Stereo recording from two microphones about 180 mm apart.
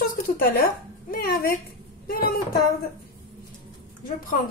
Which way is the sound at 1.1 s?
55° left (ahead or behind).